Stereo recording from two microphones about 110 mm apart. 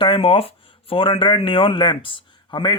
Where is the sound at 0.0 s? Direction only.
55° left (ahead or behind).